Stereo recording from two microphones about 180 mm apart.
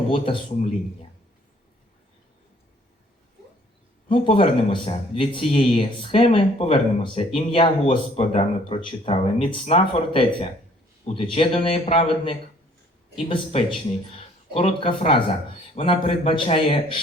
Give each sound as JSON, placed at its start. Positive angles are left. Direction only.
{"t": 0.1, "sound": "speech", "side_deg": 30}
{"t": 4.1, "sound": "a man's voice", "side_deg": 30}